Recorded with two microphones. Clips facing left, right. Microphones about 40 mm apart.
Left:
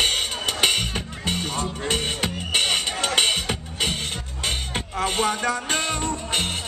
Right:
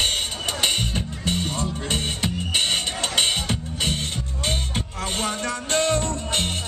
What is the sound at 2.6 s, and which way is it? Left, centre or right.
Music, centre.